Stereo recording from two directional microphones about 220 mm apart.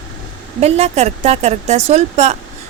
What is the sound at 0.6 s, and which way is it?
A woman's voice, 30° right (ahead or behind).